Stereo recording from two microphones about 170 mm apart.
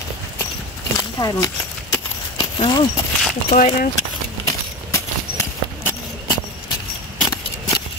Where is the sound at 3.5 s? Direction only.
50° left (ahead or behind).